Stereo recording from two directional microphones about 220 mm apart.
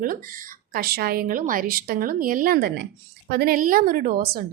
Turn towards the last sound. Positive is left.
turn(degrees=-40)  # may be behind; listen again after turning